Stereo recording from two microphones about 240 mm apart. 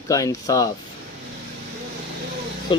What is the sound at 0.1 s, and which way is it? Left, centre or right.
Speech, centre.